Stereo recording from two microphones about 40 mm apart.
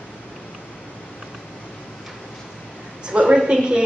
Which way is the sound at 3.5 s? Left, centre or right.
Right.